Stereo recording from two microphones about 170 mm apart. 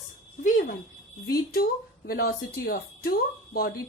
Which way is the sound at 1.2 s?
65° left (ahead or behind).